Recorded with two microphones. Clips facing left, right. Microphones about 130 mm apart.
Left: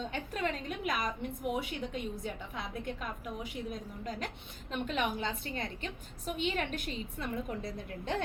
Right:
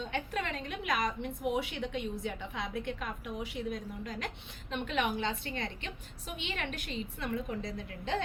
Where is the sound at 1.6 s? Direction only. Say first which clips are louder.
Right 2 dB; 40° left (ahead or behind).